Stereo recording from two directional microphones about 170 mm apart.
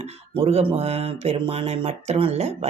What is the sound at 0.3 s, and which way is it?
Speech, 35° right (ahead or behind).